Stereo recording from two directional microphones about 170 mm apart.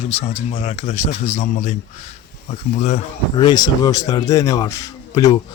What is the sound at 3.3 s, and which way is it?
Speech, 25° left (ahead or behind).